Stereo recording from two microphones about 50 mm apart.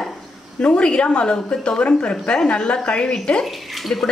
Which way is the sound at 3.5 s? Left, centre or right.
Centre.